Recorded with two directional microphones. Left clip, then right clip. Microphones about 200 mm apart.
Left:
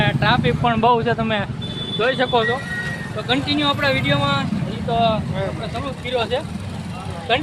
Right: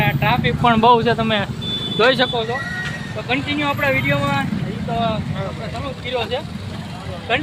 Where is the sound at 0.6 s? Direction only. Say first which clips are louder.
Right 5 dB; 10° right (ahead or behind).